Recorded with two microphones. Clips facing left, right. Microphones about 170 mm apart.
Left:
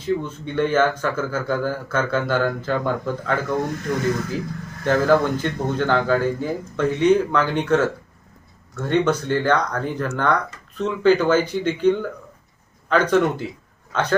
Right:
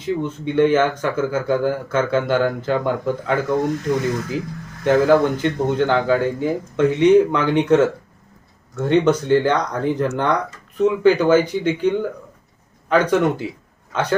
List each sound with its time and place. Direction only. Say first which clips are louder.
0.0 s speech: right 1 dB; 15° right (ahead or behind)
4.8 s a man's voice: right 3 dB; 15° right (ahead or behind)